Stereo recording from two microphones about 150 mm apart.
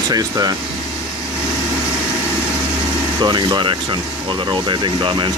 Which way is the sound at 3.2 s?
30° right (ahead or behind).